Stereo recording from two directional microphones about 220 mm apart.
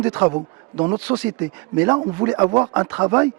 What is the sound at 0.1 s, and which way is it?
A man's voice, 20° right (ahead or behind).